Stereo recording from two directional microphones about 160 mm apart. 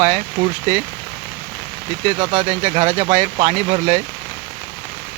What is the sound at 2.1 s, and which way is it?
Speech, 45° right (ahead or behind).